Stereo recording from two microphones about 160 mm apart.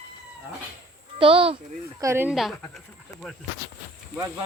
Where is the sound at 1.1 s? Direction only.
35° right (ahead or behind).